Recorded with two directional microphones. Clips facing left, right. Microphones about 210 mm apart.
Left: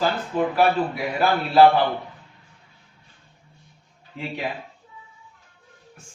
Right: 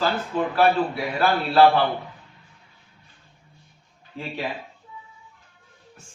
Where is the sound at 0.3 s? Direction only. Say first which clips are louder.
Even; 15° left (ahead or behind).